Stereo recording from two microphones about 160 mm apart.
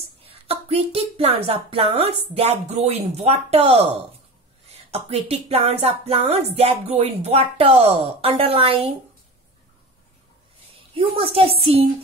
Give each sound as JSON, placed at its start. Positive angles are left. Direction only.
{"t": 0.2, "sound": "a woman's voice", "side_deg": -40}
{"t": 11.0, "sound": "speech", "side_deg": -35}